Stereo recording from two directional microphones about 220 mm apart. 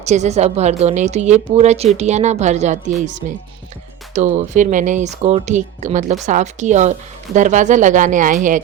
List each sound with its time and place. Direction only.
0.0 s a woman's voice: 30° right (ahead or behind)